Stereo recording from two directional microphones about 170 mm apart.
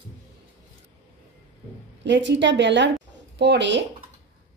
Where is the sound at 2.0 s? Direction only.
90° right.